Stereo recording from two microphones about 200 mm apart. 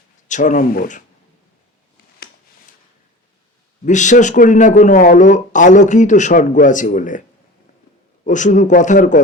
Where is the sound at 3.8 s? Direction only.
35° left (ahead or behind).